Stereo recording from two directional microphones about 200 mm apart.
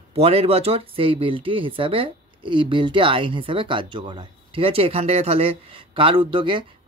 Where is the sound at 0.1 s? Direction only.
30° right (ahead or behind).